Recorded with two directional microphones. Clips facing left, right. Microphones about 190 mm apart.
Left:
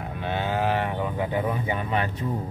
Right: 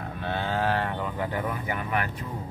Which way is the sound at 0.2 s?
15° left (ahead or behind).